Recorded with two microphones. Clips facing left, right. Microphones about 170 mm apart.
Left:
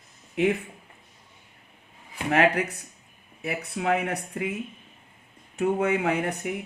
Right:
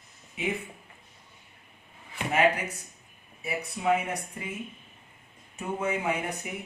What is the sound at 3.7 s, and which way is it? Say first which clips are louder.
Speech: left 1 dB; 70° left (ahead or behind).